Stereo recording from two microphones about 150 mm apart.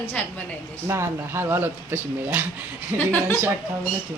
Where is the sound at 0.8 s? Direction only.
15° right (ahead or behind).